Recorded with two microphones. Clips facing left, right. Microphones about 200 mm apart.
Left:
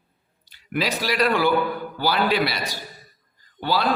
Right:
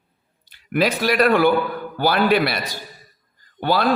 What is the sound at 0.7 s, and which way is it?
A man's voice, 55° right (ahead or behind).